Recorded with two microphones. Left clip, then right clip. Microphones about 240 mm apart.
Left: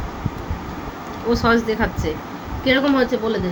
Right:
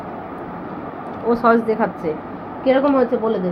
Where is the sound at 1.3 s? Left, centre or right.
Centre.